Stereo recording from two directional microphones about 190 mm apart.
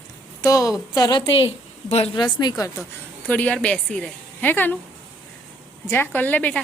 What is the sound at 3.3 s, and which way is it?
A woman's voice, 5° left (ahead or behind).